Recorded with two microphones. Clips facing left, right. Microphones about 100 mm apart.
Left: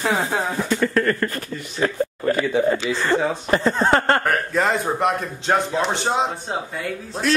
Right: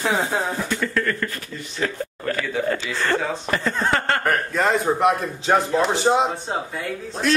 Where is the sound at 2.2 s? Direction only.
20° left (ahead or behind).